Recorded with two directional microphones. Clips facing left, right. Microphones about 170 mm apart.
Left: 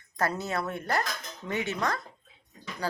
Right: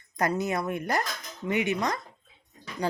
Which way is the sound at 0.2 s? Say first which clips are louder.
Right 3 dB; 15° right (ahead or behind).